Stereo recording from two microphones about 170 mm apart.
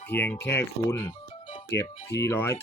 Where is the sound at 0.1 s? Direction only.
10° left (ahead or behind).